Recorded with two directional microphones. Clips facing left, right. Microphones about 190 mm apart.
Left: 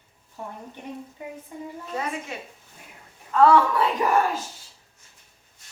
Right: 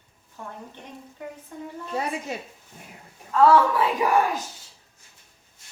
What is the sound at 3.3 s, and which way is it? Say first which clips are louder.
Speech: even; centre (ahead or behind).